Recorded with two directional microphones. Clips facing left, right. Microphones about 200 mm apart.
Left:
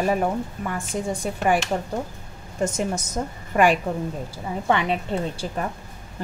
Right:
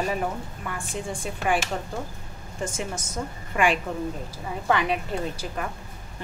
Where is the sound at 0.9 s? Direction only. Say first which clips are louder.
Left 5 dB; 40° left (ahead or behind).